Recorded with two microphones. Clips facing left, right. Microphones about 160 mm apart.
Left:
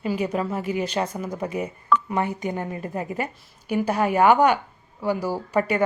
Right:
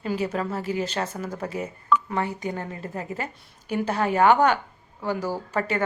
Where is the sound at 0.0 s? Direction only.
10° left (ahead or behind).